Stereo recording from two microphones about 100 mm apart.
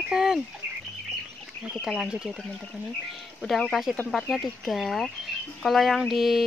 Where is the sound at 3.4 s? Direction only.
Centre (ahead or behind).